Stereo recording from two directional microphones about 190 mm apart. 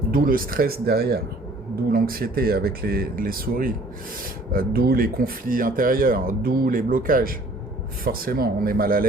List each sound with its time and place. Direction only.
0.1 s speech: 50° right (ahead or behind)